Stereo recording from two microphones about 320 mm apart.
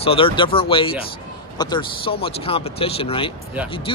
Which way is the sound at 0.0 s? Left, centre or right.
Centre.